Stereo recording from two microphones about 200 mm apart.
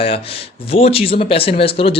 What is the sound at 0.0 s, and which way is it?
Speech, 30° left (ahead or behind).